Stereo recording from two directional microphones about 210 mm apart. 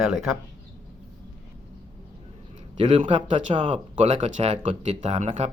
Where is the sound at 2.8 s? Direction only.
25° right (ahead or behind).